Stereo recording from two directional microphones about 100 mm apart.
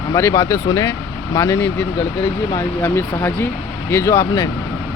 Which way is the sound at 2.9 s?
20° left (ahead or behind).